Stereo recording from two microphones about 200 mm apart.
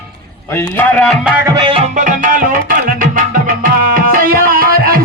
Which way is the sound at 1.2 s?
15° right (ahead or behind).